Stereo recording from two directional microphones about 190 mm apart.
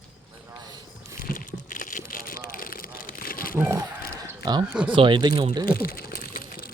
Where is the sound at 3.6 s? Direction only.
15° right (ahead or behind).